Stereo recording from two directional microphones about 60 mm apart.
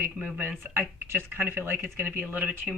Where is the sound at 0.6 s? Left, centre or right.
Right.